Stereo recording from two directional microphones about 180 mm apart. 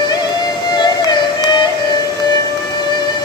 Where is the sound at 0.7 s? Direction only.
25° left (ahead or behind).